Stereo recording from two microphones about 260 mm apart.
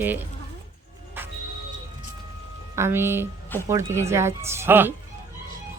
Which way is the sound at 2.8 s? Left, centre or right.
Centre.